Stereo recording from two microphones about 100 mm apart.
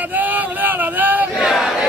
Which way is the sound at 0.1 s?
15° right (ahead or behind).